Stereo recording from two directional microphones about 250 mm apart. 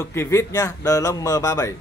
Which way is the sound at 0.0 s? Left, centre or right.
Centre.